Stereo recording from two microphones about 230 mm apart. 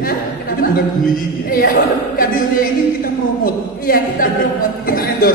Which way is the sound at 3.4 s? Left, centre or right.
Left.